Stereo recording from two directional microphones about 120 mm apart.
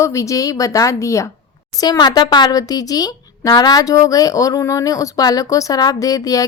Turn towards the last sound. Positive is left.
turn(degrees=30)  # may be behind; listen again after turning